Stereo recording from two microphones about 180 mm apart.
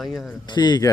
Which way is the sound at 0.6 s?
25° left (ahead or behind).